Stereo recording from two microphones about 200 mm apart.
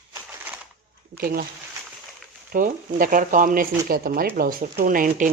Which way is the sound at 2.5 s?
45° right (ahead or behind).